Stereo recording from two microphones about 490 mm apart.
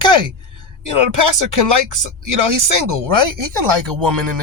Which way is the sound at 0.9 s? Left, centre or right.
Right.